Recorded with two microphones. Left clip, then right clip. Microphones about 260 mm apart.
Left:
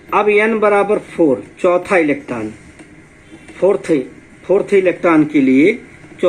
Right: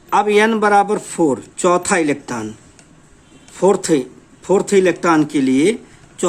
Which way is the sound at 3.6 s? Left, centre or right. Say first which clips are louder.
Left 1 dB; right.